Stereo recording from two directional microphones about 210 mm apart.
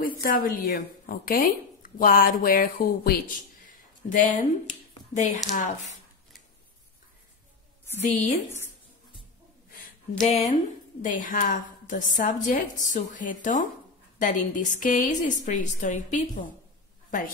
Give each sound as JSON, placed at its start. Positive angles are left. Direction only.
{"t": 0.0, "sound": "a woman's voice", "side_deg": 40}
{"t": 8.0, "sound": "a woman's voice", "side_deg": 35}
{"t": 10.2, "sound": "a woman's voice", "side_deg": 30}